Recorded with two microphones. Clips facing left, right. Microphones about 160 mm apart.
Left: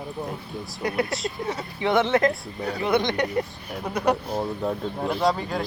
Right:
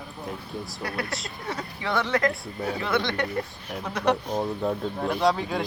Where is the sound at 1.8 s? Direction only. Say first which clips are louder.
Left 5 dB; 20° left (ahead or behind).